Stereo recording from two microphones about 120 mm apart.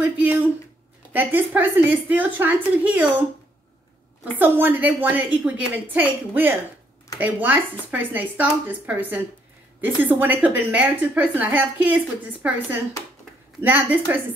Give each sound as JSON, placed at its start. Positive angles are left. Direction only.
{"t": 1.1, "sound": "a woman's voice", "side_deg": -15}
{"t": 13.6, "sound": "a woman's voice", "side_deg": -15}